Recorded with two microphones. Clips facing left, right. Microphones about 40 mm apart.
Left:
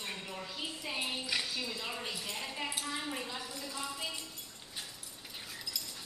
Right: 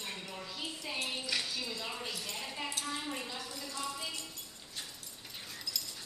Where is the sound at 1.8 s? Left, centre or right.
Centre.